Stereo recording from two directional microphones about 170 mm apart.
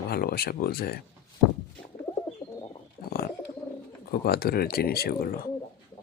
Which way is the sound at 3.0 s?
65° left (ahead or behind).